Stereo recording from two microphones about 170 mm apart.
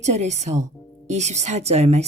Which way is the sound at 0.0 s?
40° right (ahead or behind).